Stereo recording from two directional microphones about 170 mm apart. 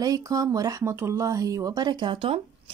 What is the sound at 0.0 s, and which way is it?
Speech, 20° right (ahead or behind).